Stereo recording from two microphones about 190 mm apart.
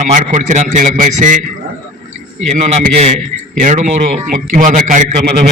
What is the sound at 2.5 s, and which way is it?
A man's voice, 40° right (ahead or behind).